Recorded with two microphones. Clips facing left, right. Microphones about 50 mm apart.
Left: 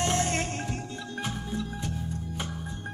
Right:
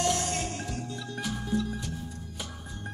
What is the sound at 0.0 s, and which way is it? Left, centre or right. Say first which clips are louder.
Music: left 1 dB; left.